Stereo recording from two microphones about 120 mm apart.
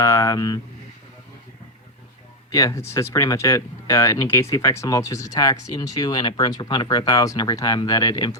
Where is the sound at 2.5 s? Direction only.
25° left (ahead or behind).